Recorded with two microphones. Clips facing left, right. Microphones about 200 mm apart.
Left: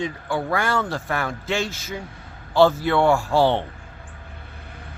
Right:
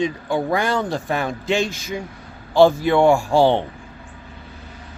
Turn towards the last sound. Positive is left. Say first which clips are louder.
# right 3 dB
turn(degrees=-15)  # may be behind; listen again after turning